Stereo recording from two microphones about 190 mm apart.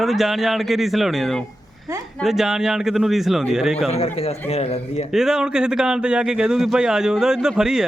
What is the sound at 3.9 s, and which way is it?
A man's voice, 30° left (ahead or behind).